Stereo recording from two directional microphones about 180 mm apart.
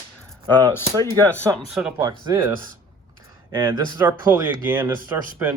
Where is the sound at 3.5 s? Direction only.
15° right (ahead or behind).